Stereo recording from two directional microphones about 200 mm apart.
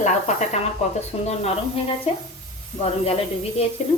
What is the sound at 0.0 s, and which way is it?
A woman's voice, 35° left (ahead or behind).